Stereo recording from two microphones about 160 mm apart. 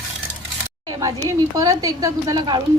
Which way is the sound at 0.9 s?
25° right (ahead or behind).